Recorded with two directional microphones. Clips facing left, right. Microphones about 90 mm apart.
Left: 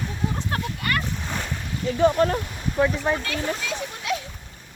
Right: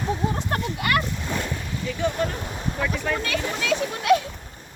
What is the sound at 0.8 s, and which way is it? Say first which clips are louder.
Splash: right 5 dB; 90° right.